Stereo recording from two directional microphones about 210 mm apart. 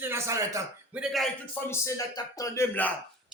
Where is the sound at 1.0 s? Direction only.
Centre (ahead or behind).